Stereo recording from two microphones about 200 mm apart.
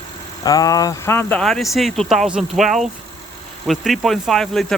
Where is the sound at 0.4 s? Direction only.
20° left (ahead or behind).